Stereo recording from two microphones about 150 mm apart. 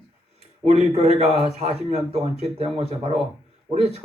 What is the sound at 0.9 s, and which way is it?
Speech, 45° right (ahead or behind).